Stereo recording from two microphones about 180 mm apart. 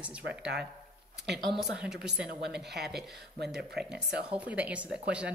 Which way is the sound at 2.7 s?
65° right (ahead or behind).